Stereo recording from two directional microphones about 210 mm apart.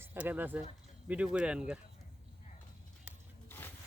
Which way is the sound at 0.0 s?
10° right (ahead or behind).